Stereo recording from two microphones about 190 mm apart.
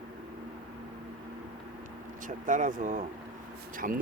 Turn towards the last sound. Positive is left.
turn(degrees=-50)  # may be behind; listen again after turning